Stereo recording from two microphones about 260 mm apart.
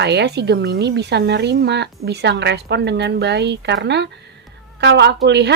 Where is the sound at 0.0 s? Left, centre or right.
Right.